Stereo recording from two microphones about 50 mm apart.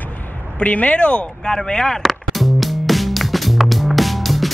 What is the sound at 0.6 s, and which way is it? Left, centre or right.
Speech, left.